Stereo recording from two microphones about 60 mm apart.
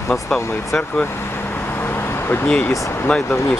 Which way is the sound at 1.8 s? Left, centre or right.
Left.